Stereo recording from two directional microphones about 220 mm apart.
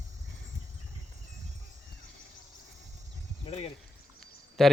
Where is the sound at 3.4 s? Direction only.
25° left (ahead or behind).